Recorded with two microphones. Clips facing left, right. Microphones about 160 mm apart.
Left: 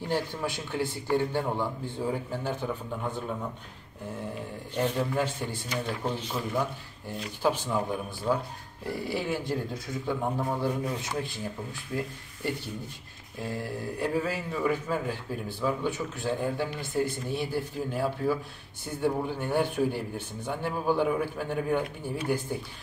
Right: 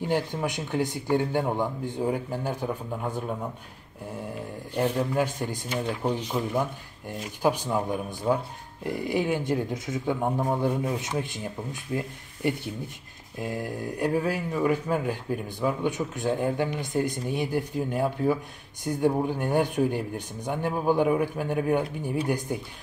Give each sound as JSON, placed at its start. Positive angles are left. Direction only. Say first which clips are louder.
{"t": 0.1, "sound": "speech", "louder": "right 2 dB", "side_deg": -15}
{"t": 4.7, "sound": "speech", "louder": "right 3 dB", "side_deg": -10}
{"t": 13.4, "sound": "speech", "louder": "right 3 dB", "side_deg": -15}